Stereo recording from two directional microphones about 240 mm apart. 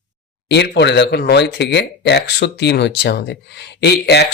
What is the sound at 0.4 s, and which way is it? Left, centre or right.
Speech, left.